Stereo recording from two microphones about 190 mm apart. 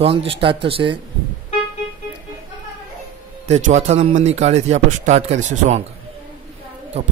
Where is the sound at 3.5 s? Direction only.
35° right (ahead or behind).